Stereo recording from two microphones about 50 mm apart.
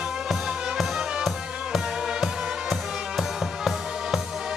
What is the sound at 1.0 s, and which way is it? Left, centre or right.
Music, centre.